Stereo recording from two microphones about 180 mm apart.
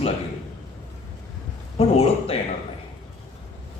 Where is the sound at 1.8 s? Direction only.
30° left (ahead or behind).